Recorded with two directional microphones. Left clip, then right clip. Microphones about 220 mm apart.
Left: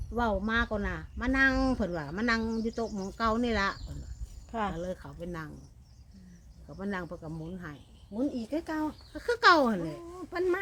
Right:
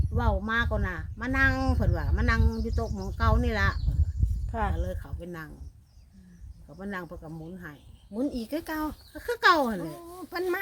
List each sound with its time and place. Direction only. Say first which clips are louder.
0.2 s speech: right 1 dB; 5° right (ahead or behind)
6.7 s speech: even; centre (ahead or behind)
8.1 s speech: right 1 dB; 40° right (ahead or behind)
9.1 s speech: even; centre (ahead or behind)
9.8 s speech: even; 40° right (ahead or behind)